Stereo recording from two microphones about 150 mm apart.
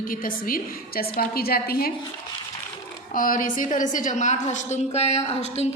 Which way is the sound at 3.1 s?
65° left (ahead or behind).